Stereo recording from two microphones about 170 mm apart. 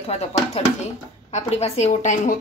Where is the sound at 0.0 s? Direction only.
35° left (ahead or behind).